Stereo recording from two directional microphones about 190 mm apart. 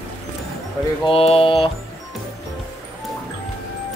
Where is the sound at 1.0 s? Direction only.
30° left (ahead or behind).